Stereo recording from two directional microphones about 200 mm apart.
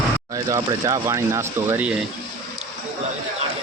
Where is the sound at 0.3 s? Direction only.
15° right (ahead or behind).